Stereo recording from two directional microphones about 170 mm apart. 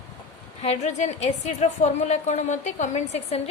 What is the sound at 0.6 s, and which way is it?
A woman's voice, 40° left (ahead or behind).